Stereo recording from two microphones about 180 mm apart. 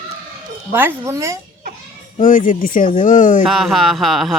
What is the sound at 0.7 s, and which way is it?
Speech, 10° right (ahead or behind).